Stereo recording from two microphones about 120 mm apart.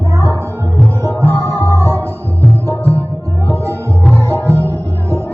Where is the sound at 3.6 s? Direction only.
25° right (ahead or behind).